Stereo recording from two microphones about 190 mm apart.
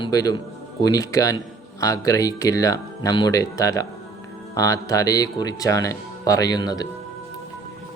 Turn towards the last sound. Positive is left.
turn(degrees=20)  # may be behind; listen again after turning